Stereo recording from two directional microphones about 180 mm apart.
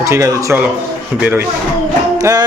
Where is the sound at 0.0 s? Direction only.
15° right (ahead or behind).